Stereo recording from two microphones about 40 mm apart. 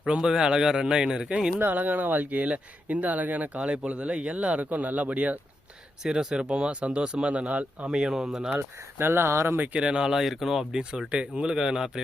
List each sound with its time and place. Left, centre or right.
0.2 s a man's voice: centre
1.5 s speech: right
3.7 s speech: right
6.0 s a man's voice: centre
6.3 s speech: right
7.9 s speech: centre
8.5 s speech: right
9.7 s a man's voice: right
11.1 s speech: right